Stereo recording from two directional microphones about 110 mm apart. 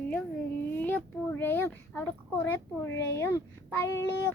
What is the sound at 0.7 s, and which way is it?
A child's voice, 20° left (ahead or behind).